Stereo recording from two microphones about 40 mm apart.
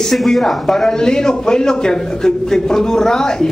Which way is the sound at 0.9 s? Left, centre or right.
Centre.